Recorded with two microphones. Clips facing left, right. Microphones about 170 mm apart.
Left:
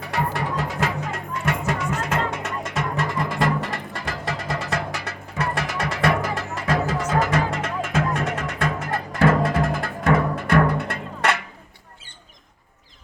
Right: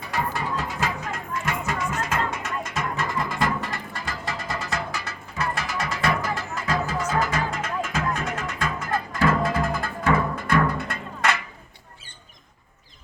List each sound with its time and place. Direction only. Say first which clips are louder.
0.0 s music: left 2 dB; 70° left (ahead or behind)